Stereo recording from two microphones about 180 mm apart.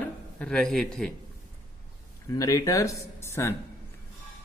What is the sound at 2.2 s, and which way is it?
Speech, 20° left (ahead or behind).